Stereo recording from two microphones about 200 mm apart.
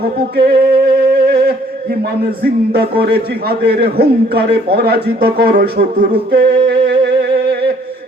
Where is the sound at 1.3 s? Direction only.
50° right (ahead or behind).